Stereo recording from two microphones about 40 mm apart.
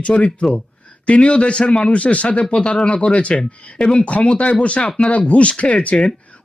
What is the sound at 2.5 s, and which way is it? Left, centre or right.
Speech, left.